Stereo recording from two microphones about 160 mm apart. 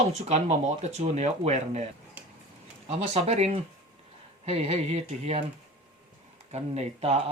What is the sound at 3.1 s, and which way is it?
Speech, 45° right (ahead or behind).